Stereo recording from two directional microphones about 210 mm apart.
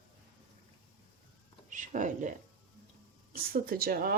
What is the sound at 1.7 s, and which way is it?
Speech, 35° right (ahead or behind).